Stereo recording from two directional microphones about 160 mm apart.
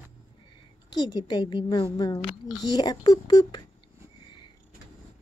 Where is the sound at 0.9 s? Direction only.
25° left (ahead or behind).